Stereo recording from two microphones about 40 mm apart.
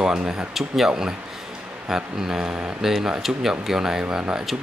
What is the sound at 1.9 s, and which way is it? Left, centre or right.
Speech, centre.